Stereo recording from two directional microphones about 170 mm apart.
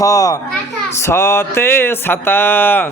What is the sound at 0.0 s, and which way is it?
Music, 20° left (ahead or behind).